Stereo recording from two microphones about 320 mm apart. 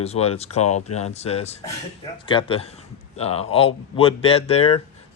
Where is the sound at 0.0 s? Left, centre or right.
Centre.